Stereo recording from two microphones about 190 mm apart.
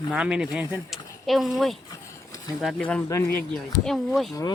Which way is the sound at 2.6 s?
5° left (ahead or behind).